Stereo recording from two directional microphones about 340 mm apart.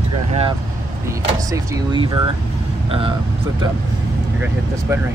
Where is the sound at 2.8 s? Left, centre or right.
Centre.